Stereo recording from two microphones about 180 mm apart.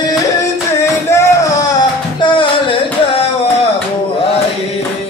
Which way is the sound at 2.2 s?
30° left (ahead or behind).